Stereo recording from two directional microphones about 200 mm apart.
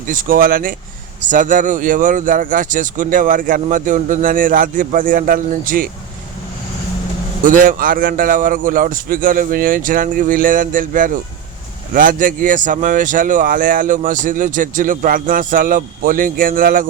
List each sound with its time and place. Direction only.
0.1 s speech: 45° right (ahead or behind)
7.4 s speech: 40° right (ahead or behind)